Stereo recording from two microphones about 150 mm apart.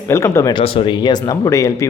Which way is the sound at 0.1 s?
20° left (ahead or behind).